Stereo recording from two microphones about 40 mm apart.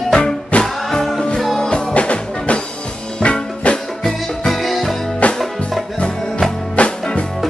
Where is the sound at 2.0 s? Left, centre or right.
Left.